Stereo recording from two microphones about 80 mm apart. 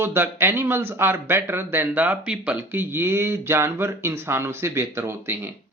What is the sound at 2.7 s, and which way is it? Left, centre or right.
Speech, right.